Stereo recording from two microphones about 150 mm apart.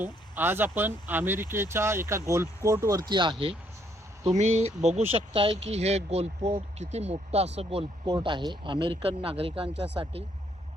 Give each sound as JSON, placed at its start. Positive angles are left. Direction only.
{"t": 0.0, "sound": "speech", "side_deg": -15}
{"t": 3.1, "sound": "speech", "side_deg": -35}
{"t": 4.3, "sound": "speech", "side_deg": -45}
{"t": 8.0, "sound": "speech", "side_deg": -30}